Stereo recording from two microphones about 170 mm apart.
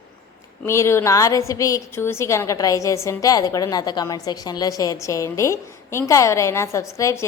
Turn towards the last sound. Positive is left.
turn(degrees=20)  # may be behind; listen again after turning